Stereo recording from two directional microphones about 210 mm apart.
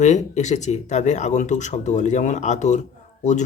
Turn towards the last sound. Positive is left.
turn(degrees=35)  # may be behind; listen again after turning